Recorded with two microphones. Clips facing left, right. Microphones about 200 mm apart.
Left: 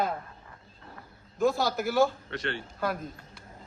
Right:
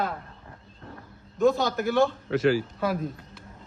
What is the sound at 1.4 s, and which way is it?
A man's voice, centre (ahead or behind).